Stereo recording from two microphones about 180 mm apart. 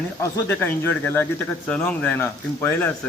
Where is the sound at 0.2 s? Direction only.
10° left (ahead or behind).